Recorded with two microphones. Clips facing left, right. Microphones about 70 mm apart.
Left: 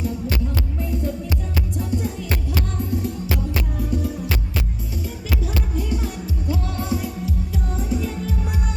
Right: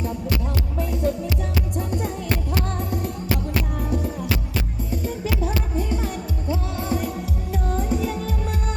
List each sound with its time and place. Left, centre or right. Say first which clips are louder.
0.8 s music: right 4 dB; right
1.8 s music: left 3 dB; right
3.8 s music: left 1 dB; right
7.5 s music: right 5 dB; right